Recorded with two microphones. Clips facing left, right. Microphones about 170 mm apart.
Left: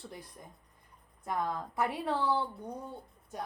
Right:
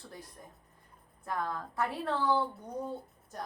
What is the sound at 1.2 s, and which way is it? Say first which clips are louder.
Speech: left 2 dB; 15° left (ahead or behind).